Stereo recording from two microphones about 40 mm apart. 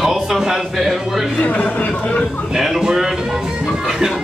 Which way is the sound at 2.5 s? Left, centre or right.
Centre.